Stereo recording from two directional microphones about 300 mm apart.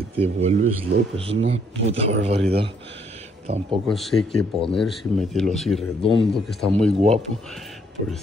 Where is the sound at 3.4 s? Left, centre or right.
Right.